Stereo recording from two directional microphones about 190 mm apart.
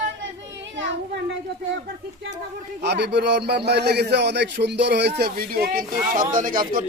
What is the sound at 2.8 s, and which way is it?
A man's voice, 60° right (ahead or behind).